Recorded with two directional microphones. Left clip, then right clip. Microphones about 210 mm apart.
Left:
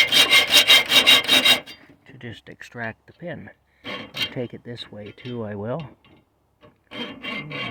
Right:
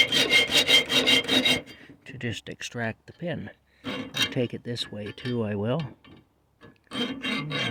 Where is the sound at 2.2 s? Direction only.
50° right (ahead or behind).